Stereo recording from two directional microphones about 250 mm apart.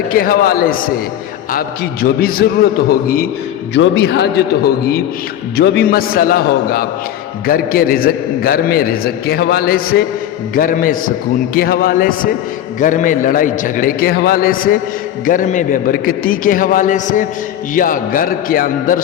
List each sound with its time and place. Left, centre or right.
0.1 s a man's voice: left